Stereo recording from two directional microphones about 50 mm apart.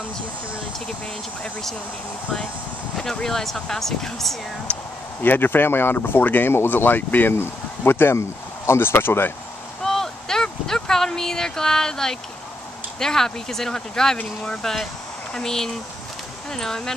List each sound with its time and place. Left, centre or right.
3.0 s speech: centre
4.7 s speech: left
5.2 s speech: left
6.5 s speech: left
7.3 s speech: left
9.8 s a sound: centre
13.0 s speech: centre